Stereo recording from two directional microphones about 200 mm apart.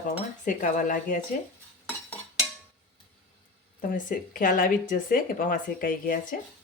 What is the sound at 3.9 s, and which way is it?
Speech, 40° left (ahead or behind).